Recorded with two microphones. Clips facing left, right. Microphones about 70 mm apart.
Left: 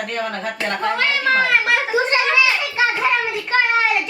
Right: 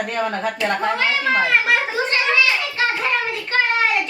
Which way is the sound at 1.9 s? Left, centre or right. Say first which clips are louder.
Left 2 dB; centre.